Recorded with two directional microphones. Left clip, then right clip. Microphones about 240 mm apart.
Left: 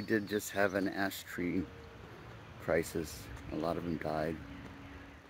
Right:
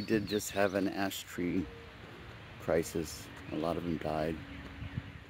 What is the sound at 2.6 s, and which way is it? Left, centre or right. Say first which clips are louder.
Speech: right 1 dB; centre.